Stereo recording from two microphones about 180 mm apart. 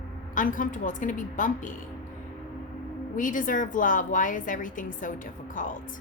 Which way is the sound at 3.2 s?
45° left (ahead or behind).